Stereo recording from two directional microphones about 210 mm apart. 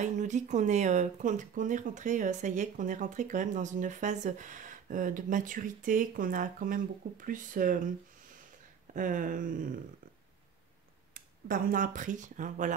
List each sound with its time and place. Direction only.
0.0 s speech: 35° right (ahead or behind)
8.9 s speech: 40° right (ahead or behind)
11.1 s speech: 40° right (ahead or behind)